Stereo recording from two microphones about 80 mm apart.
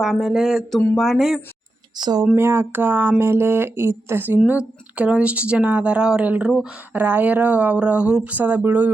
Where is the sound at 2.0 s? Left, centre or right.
Right.